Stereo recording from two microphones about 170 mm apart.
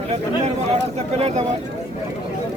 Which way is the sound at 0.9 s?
40° right (ahead or behind).